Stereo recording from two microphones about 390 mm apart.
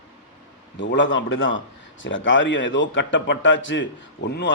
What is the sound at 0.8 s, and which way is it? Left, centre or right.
A man's voice, left.